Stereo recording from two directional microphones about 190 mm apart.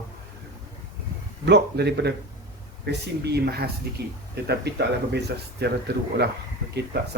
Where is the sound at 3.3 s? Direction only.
55° right (ahead or behind).